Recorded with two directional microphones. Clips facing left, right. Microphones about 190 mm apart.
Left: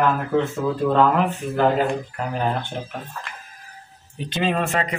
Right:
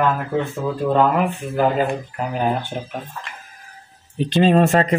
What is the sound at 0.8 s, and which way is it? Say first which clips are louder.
Speech: right 1 dB; 5° right (ahead or behind).